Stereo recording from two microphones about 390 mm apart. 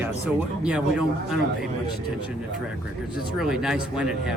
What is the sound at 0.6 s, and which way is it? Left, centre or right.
Speech, centre.